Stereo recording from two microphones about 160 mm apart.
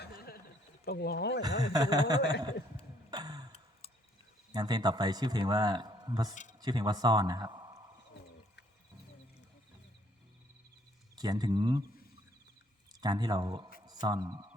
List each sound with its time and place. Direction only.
0.0 s a sound: 75° left (ahead or behind)
0.9 s speech: 85° left
1.7 s a man's voice: 25° right (ahead or behind)
3.1 s tick-tock: 25° right (ahead or behind)
4.5 s a man's voice: 25° right (ahead or behind)
11.1 s speech: 25° right (ahead or behind)
13.0 s a man's voice: 25° right (ahead or behind)